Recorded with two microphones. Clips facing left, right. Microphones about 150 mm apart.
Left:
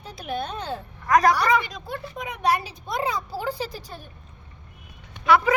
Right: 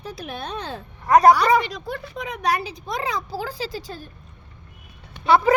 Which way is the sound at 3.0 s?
90° right.